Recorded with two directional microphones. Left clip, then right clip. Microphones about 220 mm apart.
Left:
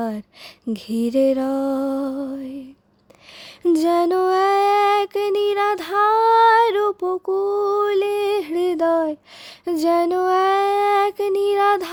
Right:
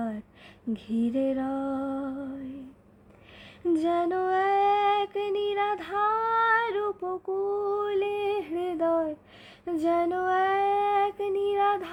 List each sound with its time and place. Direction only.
0.7 s female singing: 45° left (ahead or behind)
3.6 s female singing: 50° left (ahead or behind)